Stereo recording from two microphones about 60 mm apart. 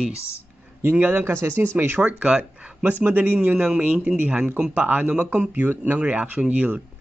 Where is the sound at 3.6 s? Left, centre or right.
Right.